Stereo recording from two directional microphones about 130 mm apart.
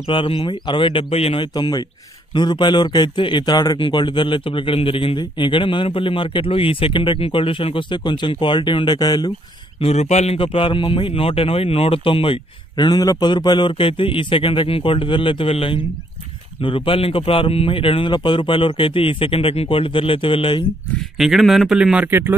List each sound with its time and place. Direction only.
0.0 s a man's voice: 45° left (ahead or behind)
1.5 s a man's voice: 30° left (ahead or behind)
9.8 s a man's voice: 55° left (ahead or behind)
21.2 s speech: centre (ahead or behind)